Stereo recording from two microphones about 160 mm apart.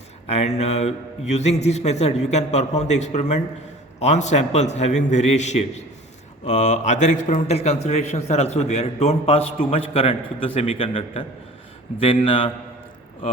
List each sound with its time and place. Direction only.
0.3 s a man's voice: 40° left (ahead or behind)